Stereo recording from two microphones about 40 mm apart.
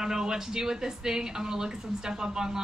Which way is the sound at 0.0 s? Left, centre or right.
Centre.